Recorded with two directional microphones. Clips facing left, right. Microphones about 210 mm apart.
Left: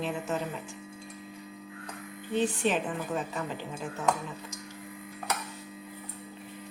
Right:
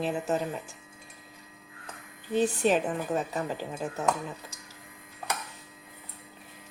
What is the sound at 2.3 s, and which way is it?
Speech, 40° right (ahead or behind).